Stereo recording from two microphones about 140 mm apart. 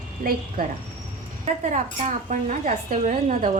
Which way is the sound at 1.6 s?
60° right (ahead or behind).